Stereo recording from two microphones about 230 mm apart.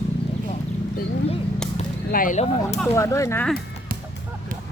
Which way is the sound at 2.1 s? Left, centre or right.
Left.